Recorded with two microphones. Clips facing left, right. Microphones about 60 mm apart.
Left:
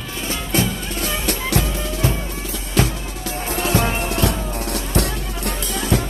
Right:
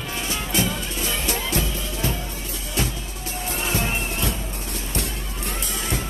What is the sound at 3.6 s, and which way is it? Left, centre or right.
Music, left.